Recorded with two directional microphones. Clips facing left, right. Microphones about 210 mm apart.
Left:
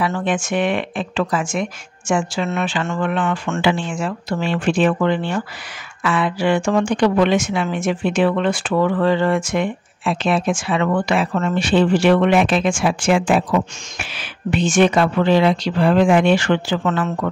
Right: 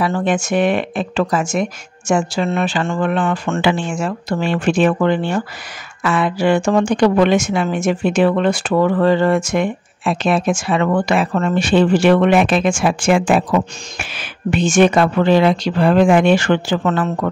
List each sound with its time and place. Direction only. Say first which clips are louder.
0.0 s speech: right 3 dB; 40° right (ahead or behind)
3.6 s a woman's voice: right 1 dB; 50° right (ahead or behind)